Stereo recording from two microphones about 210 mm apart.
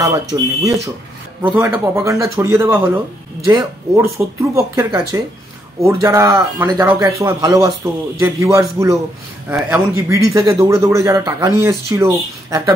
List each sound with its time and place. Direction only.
0.1 s speech: 15° right (ahead or behind)